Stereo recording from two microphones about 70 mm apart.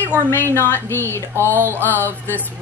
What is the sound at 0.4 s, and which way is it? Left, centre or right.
Speech, left.